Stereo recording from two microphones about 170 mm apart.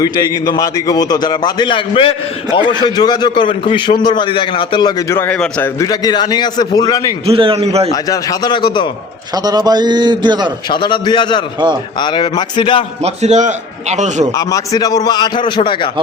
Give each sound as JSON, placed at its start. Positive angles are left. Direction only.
{"t": 0.0, "sound": "a man's voice", "side_deg": 20}
{"t": 7.3, "sound": "a man's voice", "side_deg": -35}
{"t": 7.9, "sound": "a man's voice", "side_deg": 20}
{"t": 9.3, "sound": "a man's voice", "side_deg": -25}
{"t": 10.7, "sound": "a man's voice", "side_deg": 30}
{"t": 13.0, "sound": "a man's voice", "side_deg": -40}
{"t": 14.3, "sound": "a man's voice", "side_deg": 20}